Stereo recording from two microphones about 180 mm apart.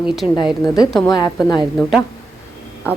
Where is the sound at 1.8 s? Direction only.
Centre (ahead or behind).